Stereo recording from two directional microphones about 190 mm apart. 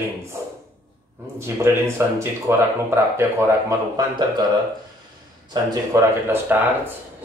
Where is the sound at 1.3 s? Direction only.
15° right (ahead or behind).